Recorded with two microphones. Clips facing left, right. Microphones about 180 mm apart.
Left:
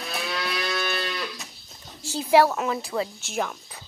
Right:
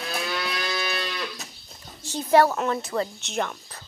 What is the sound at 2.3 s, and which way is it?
A woman's voice, centre (ahead or behind).